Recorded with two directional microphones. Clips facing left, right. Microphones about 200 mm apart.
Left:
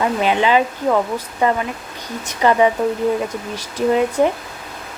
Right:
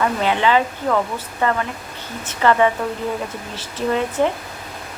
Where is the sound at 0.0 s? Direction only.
15° left (ahead or behind).